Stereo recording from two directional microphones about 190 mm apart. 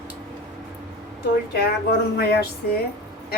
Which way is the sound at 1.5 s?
55° left (ahead or behind).